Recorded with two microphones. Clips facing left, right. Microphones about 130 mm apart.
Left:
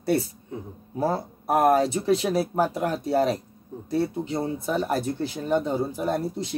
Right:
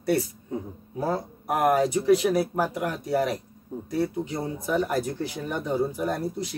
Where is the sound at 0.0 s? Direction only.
30° left (ahead or behind).